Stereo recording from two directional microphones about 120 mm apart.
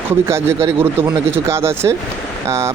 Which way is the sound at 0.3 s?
20° right (ahead or behind).